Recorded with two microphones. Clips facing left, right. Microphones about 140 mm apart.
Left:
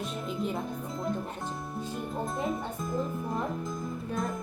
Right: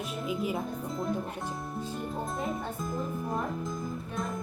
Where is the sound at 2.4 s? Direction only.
Centre (ahead or behind).